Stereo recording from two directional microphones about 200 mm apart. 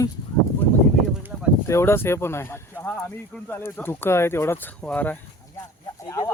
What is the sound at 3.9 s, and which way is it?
Speech, 10° left (ahead or behind).